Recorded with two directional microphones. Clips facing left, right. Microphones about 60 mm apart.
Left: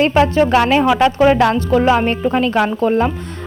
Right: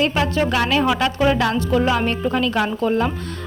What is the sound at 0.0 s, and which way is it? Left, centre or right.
A woman's voice, left.